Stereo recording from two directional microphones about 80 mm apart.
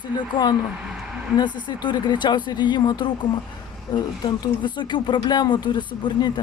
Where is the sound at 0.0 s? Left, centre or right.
Left.